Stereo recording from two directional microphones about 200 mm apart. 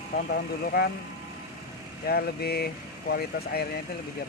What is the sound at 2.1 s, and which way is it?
Speech, 50° left (ahead or behind).